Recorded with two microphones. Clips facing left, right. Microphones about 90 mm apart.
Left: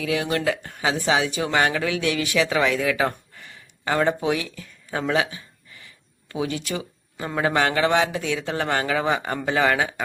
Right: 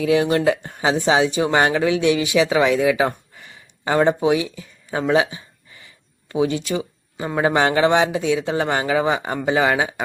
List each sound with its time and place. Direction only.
0.0 s speech: 30° right (ahead or behind)